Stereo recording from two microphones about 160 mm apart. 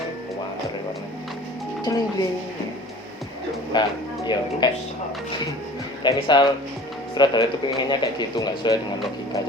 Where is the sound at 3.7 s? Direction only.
30° left (ahead or behind).